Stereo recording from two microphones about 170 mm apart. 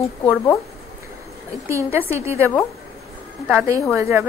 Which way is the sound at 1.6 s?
15° right (ahead or behind).